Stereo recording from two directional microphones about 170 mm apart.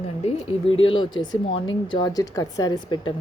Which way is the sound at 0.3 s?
35° left (ahead or behind).